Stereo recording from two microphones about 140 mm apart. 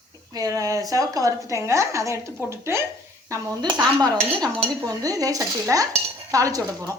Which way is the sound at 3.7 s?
30° right (ahead or behind).